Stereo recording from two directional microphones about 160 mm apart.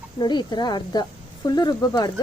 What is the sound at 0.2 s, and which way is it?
Speech, 25° left (ahead or behind).